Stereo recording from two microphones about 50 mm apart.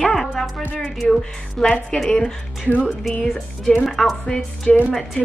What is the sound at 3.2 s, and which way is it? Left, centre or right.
A woman's voice, centre.